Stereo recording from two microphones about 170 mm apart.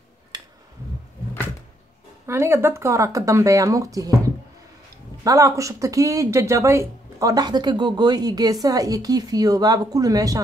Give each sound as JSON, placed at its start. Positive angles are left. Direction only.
{"t": 0.3, "sound": "finger snapping", "side_deg": -25}
{"t": 2.2, "sound": "speech", "side_deg": -15}